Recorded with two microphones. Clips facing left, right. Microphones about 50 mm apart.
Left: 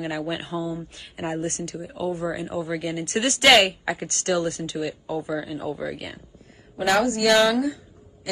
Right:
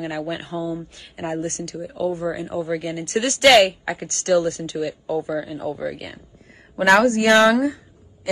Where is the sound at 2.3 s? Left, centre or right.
Left.